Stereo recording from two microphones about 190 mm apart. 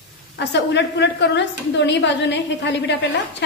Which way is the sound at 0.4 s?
65° left (ahead or behind).